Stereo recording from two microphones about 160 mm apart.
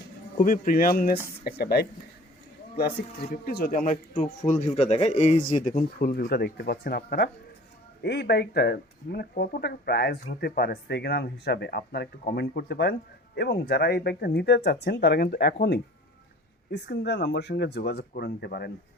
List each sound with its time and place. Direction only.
0.3 s speech: 60° left (ahead or behind)
1.5 s speech: 80° left
8.0 s speech: 90° left
16.7 s speech: 90° left